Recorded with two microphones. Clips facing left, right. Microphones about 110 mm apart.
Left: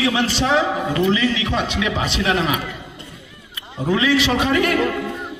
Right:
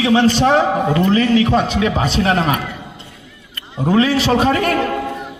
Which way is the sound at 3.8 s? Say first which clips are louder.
Right 3 dB; 40° right (ahead or behind).